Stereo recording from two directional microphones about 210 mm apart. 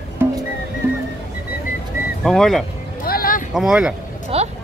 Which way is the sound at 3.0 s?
45° left (ahead or behind).